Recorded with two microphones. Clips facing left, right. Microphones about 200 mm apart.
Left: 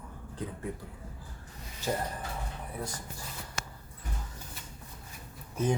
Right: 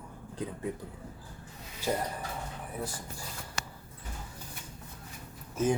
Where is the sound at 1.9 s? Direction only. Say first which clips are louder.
Right 1 dB; 5° right (ahead or behind).